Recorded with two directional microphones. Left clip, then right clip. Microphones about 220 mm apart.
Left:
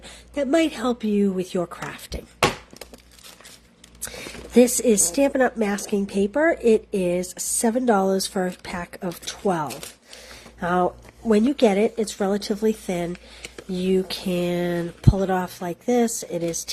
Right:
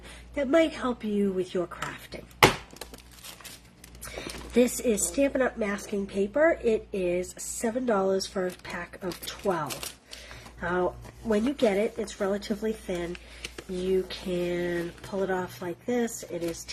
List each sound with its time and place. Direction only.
0.0 s speech: 40° left (ahead or behind)
4.5 s a woman's voice: 45° left (ahead or behind)
13.1 s a sound: 5° left (ahead or behind)
13.8 s a woman's voice: 45° left (ahead or behind)